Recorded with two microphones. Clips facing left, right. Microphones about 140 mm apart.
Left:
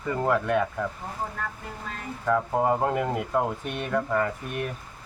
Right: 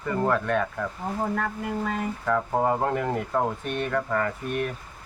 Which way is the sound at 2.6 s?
10° left (ahead or behind).